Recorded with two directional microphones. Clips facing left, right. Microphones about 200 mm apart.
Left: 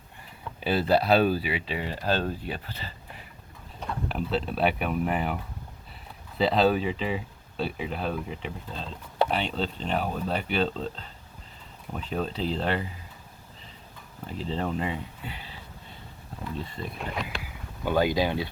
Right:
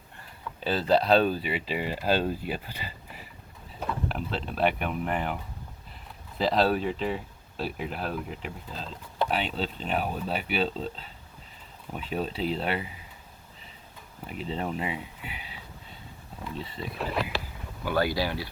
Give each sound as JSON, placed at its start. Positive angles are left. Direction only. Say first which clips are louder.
{"t": 0.6, "sound": "speech", "louder": "left 1 dB", "side_deg": 10}
{"t": 4.1, "sound": "speech", "louder": "left 4 dB", "side_deg": 5}
{"t": 14.4, "sound": "speech", "louder": "left 2 dB", "side_deg": -5}
{"t": 16.6, "sound": "speech", "louder": "right 3 dB", "side_deg": 0}
{"t": 17.8, "sound": "speech", "louder": "left 3 dB", "side_deg": 20}